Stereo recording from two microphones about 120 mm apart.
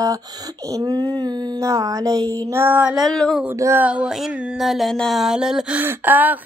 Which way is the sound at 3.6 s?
20° right (ahead or behind).